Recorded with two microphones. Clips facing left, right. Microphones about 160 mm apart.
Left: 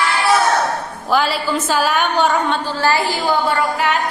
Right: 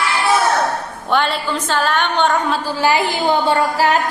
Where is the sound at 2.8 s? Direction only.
15° right (ahead or behind).